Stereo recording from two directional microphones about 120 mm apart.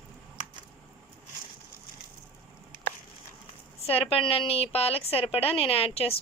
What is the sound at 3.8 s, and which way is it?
A woman's voice, 55° left (ahead or behind).